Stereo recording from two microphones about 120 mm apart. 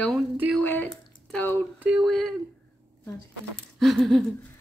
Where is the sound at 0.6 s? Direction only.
10° left (ahead or behind).